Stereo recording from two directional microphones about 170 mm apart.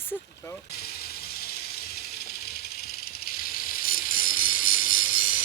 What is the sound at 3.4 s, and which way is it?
Tambourine, 60° left (ahead or behind).